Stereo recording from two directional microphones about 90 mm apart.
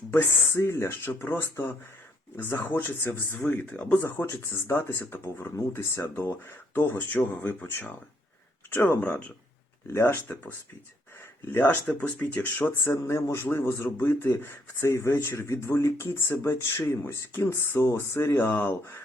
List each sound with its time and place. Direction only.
0.1 s speech: 25° left (ahead or behind)
11.5 s speech: 25° left (ahead or behind)
11.9 s speech: 10° left (ahead or behind)
13.0 s speech: 35° left (ahead or behind)